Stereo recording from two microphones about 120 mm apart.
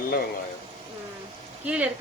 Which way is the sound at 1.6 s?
10° right (ahead or behind).